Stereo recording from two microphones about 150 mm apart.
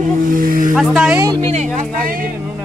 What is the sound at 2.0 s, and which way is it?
Speech, 70° right (ahead or behind).